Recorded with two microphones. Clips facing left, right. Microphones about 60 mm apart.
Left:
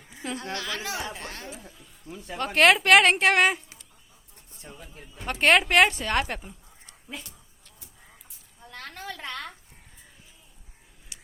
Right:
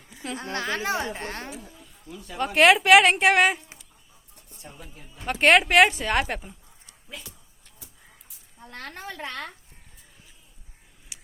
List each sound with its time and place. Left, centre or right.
0.5 s speech: right
2.0 s speech: left
2.4 s a woman's voice: centre
5.2 s speech: centre
8.6 s a sound: right
9.0 s speech: right
11.1 s a sound: centre